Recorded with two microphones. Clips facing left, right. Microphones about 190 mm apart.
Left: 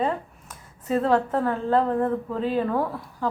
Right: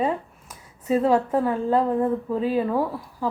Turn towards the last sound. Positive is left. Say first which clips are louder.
# right 1 dB
turn(degrees=-10)  # may be behind; listen again after turning